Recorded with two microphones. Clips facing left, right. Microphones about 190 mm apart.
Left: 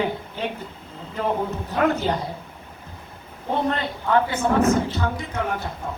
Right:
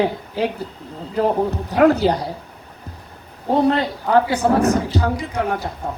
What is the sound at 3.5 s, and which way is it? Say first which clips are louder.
A woman's voice: right 7 dB; 35° right (ahead or behind).